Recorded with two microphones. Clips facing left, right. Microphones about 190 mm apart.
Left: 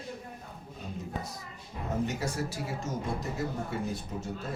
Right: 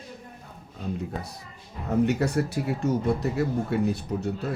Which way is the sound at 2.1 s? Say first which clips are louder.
Right 8 dB; 65° right (ahead or behind).